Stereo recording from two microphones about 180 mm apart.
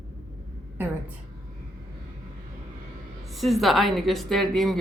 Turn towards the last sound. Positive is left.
turn(degrees=0)  # may be behind; listen again after turning